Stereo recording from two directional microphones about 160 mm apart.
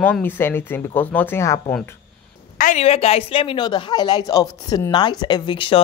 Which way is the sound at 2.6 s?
45° left (ahead or behind).